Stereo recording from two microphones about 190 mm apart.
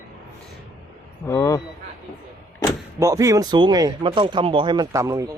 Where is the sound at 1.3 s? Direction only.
15° left (ahead or behind).